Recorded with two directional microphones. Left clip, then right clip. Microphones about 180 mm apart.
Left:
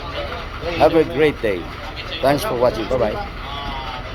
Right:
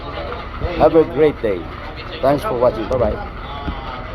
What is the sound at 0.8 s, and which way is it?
A man's voice, 25° left (ahead or behind).